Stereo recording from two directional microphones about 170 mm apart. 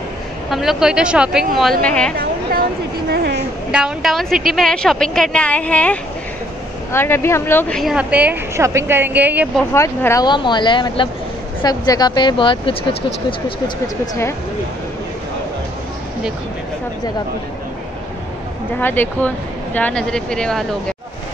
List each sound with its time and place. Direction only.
0.5 s speech: centre (ahead or behind)
3.1 s a sound: 75° right (ahead or behind)
3.7 s speech: 5° right (ahead or behind)
9.8 s speech: 15° left (ahead or behind)
18.8 s speech: 10° left (ahead or behind)